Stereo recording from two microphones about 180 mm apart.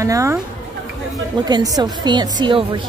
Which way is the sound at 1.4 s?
20° right (ahead or behind).